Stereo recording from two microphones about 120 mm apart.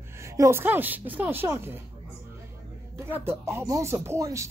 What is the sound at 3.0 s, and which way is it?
Speech, 20° right (ahead or behind).